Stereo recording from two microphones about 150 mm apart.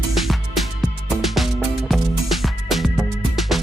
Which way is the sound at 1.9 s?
Centre (ahead or behind).